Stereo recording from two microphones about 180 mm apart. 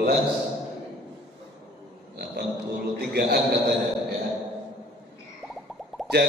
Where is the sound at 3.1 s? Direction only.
60° right (ahead or behind).